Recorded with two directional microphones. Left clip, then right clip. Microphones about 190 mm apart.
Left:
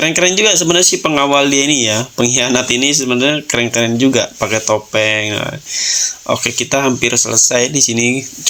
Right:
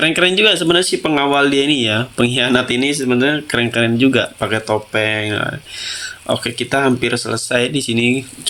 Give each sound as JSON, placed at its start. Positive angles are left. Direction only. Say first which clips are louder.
{"t": 0.0, "sound": "speech", "louder": "left 1 dB", "side_deg": 15}